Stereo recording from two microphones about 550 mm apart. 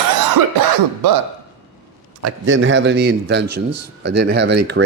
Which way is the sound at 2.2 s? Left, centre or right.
Right.